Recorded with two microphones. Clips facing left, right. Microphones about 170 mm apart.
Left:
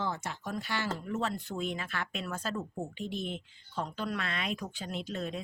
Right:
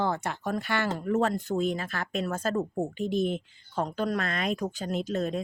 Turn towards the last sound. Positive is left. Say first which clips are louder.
# right 7 dB
turn(degrees=-45)  # may be behind; listen again after turning